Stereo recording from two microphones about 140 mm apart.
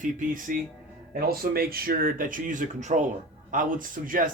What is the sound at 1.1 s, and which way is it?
Speech, 90° right.